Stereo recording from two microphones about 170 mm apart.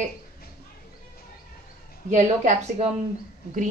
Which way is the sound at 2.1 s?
45° right (ahead or behind).